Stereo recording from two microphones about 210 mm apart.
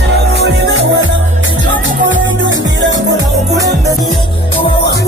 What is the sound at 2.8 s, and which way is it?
Music, 60° right (ahead or behind).